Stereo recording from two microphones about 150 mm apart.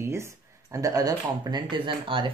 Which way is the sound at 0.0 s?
20° right (ahead or behind).